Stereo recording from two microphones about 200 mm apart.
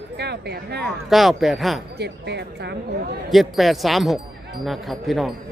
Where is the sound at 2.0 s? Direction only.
55° right (ahead or behind).